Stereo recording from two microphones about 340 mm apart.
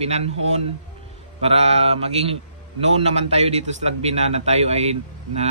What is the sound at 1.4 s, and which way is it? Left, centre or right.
Mantra, centre.